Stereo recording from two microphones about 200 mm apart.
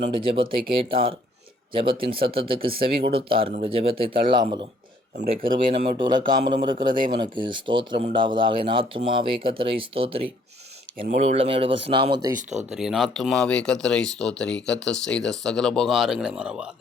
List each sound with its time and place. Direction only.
0.0 s speech: 25° right (ahead or behind)
5.1 s speech: 45° right (ahead or behind)
5.9 s speech: 20° right (ahead or behind)
12.7 s speech: centre (ahead or behind)